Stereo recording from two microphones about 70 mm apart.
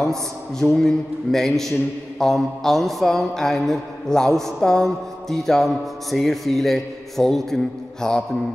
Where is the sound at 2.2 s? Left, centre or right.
Centre.